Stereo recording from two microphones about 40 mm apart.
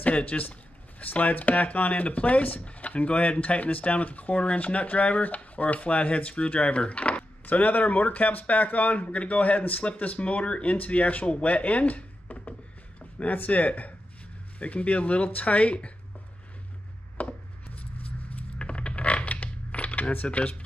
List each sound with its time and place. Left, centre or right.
0.0 s speech: left
7.4 s speech: left
13.0 s a sound: left
13.4 s speech: left
17.2 s chopping: left
18.6 s coin: left
20.2 s speech: left